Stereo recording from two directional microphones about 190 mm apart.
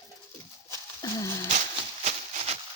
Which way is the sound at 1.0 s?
15° left (ahead or behind).